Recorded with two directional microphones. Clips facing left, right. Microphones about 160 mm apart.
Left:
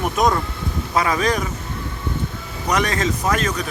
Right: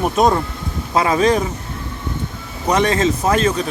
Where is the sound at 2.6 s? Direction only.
25° right (ahead or behind).